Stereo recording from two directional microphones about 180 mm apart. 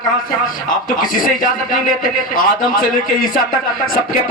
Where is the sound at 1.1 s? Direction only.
50° left (ahead or behind).